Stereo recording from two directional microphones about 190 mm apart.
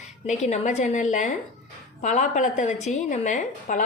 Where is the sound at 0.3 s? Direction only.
40° left (ahead or behind).